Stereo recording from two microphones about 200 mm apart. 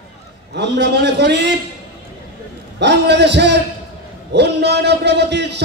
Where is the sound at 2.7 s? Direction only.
60° right (ahead or behind).